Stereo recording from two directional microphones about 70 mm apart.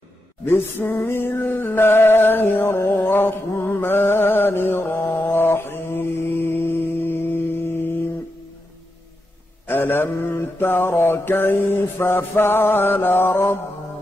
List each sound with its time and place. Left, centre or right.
0.5 s music: left
9.7 s mantra: left